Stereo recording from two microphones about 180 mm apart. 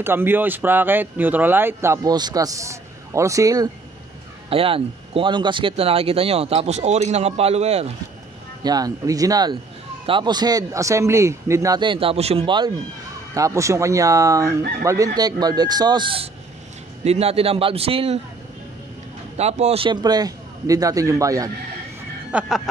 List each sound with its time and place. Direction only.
0.0 s speech: 10° right (ahead or behind)
4.5 s speech: 30° right (ahead or behind)
8.6 s speech: 20° right (ahead or behind)
19.3 s speech: 40° right (ahead or behind); by 21.5 s 20° right (ahead or behind)
22.3 s speech: 5° right (ahead or behind)